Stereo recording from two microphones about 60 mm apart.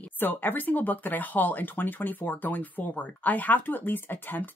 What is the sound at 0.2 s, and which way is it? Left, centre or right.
Speech, left.